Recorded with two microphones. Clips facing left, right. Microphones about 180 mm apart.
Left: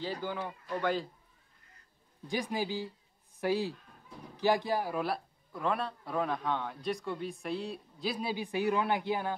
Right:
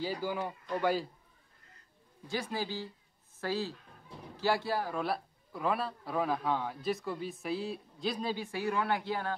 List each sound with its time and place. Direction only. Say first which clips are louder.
0.0 s speech: right 2 dB; 10° right (ahead or behind)
2.2 s a man's voice: left 2 dB; 15° left (ahead or behind)
5.0 s a man's voice: even; centre (ahead or behind); by 9.3 s 15° left (ahead or behind)